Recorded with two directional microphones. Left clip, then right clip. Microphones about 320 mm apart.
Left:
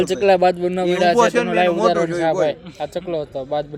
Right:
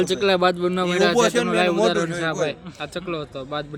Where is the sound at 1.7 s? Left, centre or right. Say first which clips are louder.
Left 3 dB; centre.